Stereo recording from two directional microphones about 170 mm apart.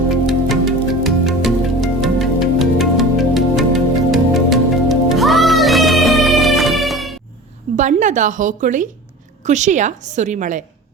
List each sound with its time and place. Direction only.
0.1 s music: centre (ahead or behind)
7.8 s a woman's voice: 45° right (ahead or behind)